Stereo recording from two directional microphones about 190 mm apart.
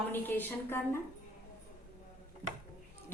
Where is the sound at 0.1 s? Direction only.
10° left (ahead or behind).